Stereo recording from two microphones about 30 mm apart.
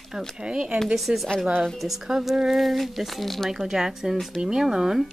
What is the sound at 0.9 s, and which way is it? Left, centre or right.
Speech, centre.